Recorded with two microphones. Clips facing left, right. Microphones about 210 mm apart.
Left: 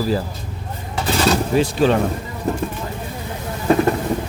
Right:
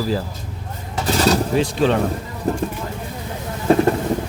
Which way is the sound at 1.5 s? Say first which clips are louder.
Left 1 dB; 5° left (ahead or behind).